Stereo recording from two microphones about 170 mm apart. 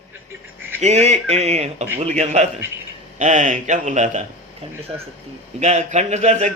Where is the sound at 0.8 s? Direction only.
40° right (ahead or behind).